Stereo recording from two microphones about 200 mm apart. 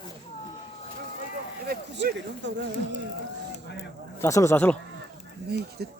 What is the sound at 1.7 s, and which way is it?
Speech, 55° right (ahead or behind).